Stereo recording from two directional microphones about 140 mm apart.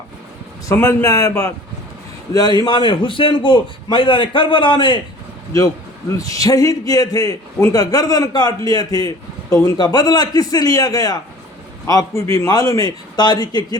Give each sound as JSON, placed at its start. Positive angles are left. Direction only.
{"t": 0.7, "sound": "a man's voice", "side_deg": 25}
{"t": 6.1, "sound": "a man's voice", "side_deg": 25}